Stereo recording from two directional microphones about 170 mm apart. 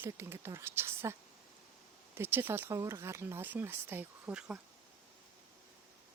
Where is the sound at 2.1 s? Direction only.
15° right (ahead or behind).